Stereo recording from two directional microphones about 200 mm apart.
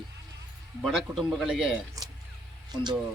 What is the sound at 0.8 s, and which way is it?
Speech, centre (ahead or behind).